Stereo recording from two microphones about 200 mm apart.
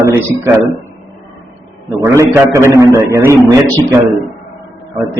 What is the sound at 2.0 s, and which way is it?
A man's voice, 15° right (ahead or behind).